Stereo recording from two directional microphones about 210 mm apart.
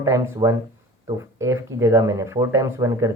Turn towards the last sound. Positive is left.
turn(degrees=-15)  # may be behind; listen again after turning